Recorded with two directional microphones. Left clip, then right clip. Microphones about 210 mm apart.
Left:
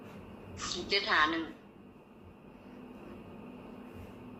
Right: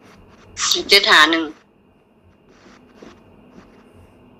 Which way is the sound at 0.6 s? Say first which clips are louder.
Right 19 dB; 45° right (ahead or behind).